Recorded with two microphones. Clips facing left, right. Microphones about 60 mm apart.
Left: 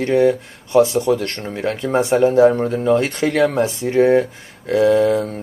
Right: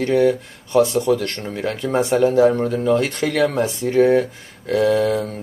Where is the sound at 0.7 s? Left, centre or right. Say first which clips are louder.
Left 2 dB; left.